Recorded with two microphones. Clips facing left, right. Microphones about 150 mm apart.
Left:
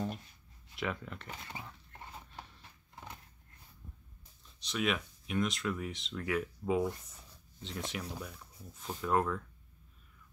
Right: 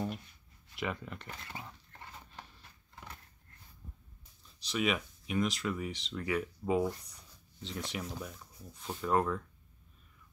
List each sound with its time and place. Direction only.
0.7 s speech: centre (ahead or behind)
1.3 s speech: 20° left (ahead or behind)
4.6 s speech: centre (ahead or behind)